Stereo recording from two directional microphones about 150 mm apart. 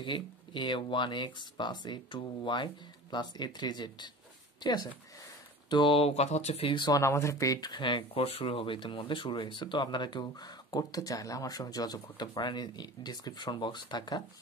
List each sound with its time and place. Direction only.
0.0 s speech: 30° left (ahead or behind)
6.7 s speech: 30° left (ahead or behind)
7.0 s speech: 20° left (ahead or behind)